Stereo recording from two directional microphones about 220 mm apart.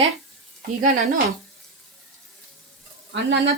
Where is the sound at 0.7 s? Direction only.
40° right (ahead or behind).